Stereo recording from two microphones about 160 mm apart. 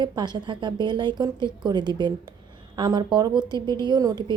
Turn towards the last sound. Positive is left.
turn(degrees=-25)  # may be behind; listen again after turning